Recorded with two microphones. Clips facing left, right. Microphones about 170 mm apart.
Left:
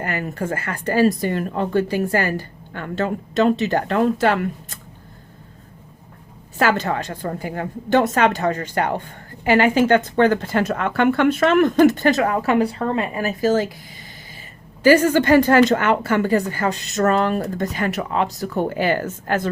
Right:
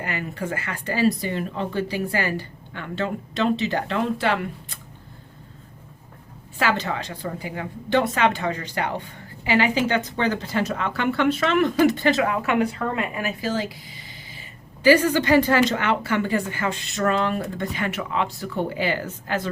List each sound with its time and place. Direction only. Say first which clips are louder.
0.0 s a woman's voice: left 4 dB; 45° left (ahead or behind)
6.6 s a woman's voice: left 4 dB; 45° left (ahead or behind)